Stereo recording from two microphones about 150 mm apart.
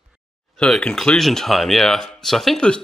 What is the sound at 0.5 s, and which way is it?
Speech, 5° left (ahead or behind).